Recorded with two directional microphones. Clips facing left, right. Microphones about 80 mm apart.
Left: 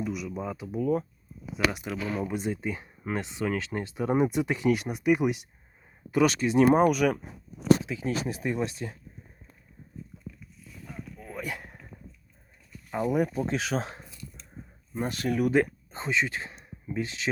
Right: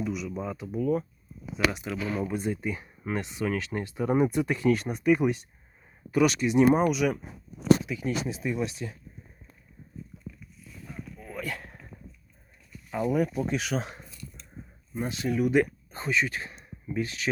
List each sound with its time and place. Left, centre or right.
0.0 s a sound: centre
0.3 s speech: centre
0.8 s speech: left
1.5 s speech: centre
2.2 s speech: left
6.1 s speech: left
7.9 s speech: left
8.1 s speech: left
11.2 s a sound: left
11.4 s a sound: centre
13.1 s speech: left
14.9 s speech: left
15.5 s speech: left